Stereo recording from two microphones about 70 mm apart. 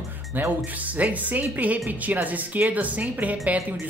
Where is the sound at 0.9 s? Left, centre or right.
Right.